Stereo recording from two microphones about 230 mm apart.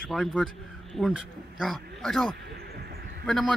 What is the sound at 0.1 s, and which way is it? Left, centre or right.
Speech, centre.